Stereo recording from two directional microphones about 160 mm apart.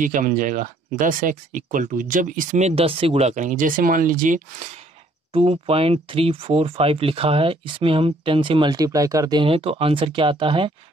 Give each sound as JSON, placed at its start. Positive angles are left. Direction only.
{"t": 0.0, "sound": "speech", "side_deg": -55}
{"t": 5.3, "sound": "speech", "side_deg": -35}